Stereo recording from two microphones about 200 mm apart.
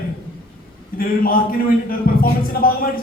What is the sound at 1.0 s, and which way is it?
A man's voice, 45° left (ahead or behind).